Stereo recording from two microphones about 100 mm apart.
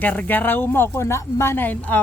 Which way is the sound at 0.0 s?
15° left (ahead or behind).